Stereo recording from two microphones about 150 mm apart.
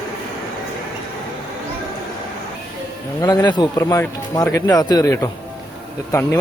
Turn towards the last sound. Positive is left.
turn(degrees=25)  # may be behind; listen again after turning